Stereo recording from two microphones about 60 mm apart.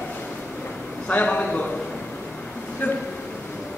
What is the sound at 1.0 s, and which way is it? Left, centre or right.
Speech, left.